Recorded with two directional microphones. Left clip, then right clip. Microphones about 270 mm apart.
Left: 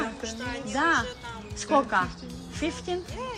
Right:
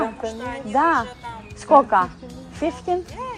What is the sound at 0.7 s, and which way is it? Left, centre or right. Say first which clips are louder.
Speech: right 6 dB; centre.